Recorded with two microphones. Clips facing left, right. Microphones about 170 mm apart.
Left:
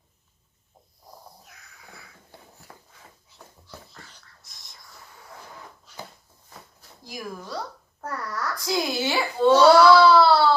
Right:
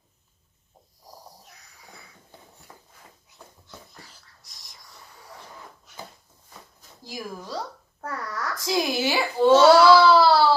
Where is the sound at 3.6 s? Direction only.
20° right (ahead or behind).